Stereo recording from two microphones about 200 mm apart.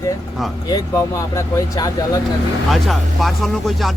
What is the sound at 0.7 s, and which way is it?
Speech, 15° left (ahead or behind).